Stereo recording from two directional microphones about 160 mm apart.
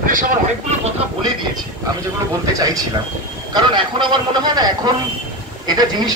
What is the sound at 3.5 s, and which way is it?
Speech, 30° right (ahead or behind).